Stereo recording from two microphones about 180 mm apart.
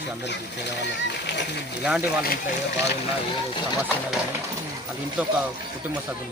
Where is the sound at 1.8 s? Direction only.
5° right (ahead or behind).